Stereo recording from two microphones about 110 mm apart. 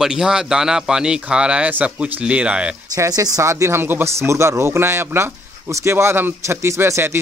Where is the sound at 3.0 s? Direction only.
35° right (ahead or behind).